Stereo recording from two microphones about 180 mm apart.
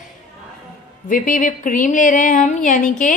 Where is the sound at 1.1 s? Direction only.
45° left (ahead or behind).